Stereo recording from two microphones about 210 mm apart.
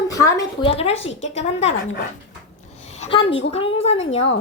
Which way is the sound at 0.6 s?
30° left (ahead or behind).